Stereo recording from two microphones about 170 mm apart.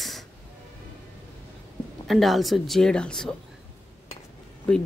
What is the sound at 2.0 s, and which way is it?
Speech, centre (ahead or behind).